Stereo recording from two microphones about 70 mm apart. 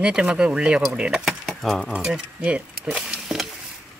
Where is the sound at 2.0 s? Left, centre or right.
Centre.